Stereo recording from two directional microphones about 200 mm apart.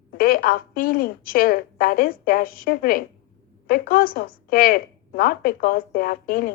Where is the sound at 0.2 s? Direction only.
45° left (ahead or behind).